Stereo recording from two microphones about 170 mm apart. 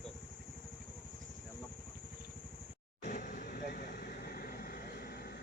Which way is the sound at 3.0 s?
50° left (ahead or behind).